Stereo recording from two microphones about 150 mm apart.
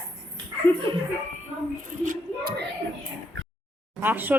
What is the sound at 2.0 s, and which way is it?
Speech, 75° right (ahead or behind).